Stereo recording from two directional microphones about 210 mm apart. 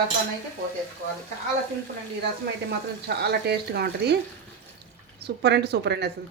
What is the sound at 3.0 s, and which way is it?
Speech, 50° right (ahead or behind).